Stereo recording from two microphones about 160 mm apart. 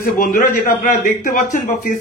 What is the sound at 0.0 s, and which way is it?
A man's voice, 55° left (ahead or behind).